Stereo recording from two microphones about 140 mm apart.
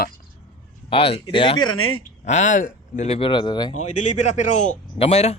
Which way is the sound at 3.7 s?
55° left (ahead or behind).